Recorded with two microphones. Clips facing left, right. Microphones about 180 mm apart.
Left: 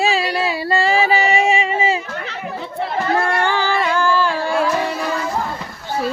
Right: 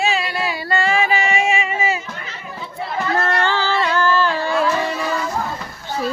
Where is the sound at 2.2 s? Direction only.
65° left (ahead or behind).